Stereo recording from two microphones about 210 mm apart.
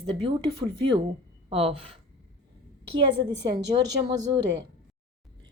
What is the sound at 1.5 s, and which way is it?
Speech, 25° right (ahead or behind).